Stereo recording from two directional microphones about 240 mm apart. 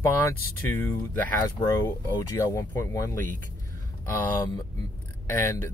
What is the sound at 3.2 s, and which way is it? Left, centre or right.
Speech, right.